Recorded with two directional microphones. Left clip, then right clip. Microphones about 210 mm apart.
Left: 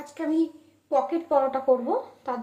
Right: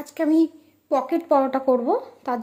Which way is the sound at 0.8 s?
55° right (ahead or behind).